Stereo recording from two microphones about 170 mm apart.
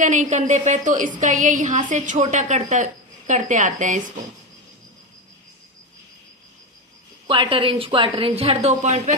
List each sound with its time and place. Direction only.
0.0 s a woman's voice: 45° right (ahead or behind)
7.3 s a woman's voice: 30° right (ahead or behind)